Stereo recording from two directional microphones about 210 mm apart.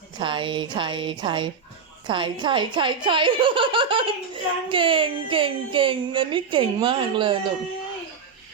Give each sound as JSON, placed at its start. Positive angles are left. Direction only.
{"t": 0.2, "sound": "speech", "side_deg": -25}